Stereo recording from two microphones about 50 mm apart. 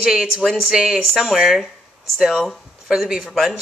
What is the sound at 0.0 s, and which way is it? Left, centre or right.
A woman's voice, centre.